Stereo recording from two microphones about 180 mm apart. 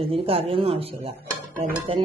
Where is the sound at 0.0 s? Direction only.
30° right (ahead or behind).